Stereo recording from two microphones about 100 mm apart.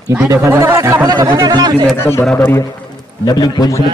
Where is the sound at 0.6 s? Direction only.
30° right (ahead or behind).